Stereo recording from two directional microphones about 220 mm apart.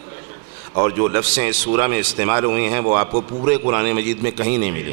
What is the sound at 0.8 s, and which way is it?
Speech, 20° right (ahead or behind).